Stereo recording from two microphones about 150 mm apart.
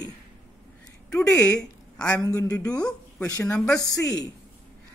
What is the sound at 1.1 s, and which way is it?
A woman's voice, 5° left (ahead or behind).